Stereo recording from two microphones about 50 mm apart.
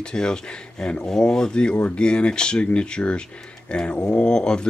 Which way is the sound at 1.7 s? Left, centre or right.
Left.